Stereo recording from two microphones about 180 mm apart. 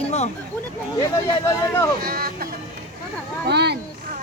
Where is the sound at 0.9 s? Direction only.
20° left (ahead or behind).